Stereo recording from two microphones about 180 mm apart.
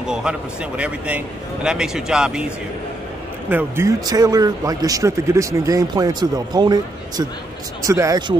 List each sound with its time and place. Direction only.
0.0 s a man's voice: 5° right (ahead or behind)
3.4 s speech: 10° right (ahead or behind)